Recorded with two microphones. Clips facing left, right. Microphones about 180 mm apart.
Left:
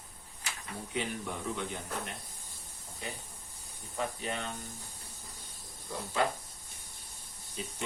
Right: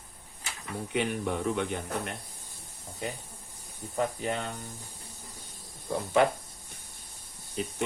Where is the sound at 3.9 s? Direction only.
50° right (ahead or behind).